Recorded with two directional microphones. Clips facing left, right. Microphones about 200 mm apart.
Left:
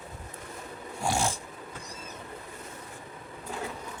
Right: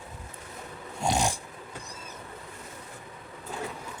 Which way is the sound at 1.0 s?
20° right (ahead or behind).